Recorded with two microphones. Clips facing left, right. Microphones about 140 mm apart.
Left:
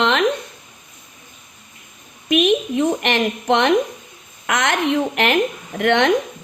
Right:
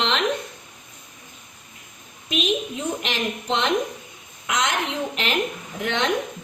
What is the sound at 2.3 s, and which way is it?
A woman's voice, 80° left.